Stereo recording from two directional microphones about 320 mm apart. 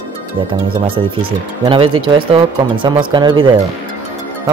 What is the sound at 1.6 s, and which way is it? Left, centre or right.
Speech, centre.